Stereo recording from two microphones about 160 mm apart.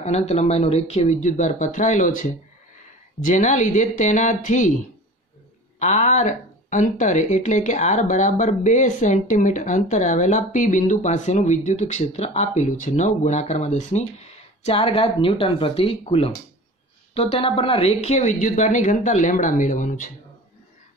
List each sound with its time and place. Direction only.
0.0 s speech: 45° left (ahead or behind)
5.8 s speech: 50° left (ahead or behind)